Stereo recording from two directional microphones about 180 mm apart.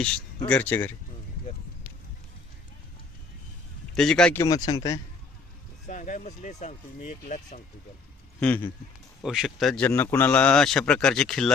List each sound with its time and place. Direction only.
0.4 s speech: 10° left (ahead or behind)
3.9 s a man's voice: 5° left (ahead or behind)
4.4 s speech: 20° left (ahead or behind)
5.9 s speech: 45° left (ahead or behind)
8.4 s speech: 10° left (ahead or behind)
9.2 s a man's voice: centre (ahead or behind)